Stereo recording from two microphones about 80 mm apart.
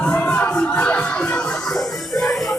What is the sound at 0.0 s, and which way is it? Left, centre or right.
Music, centre.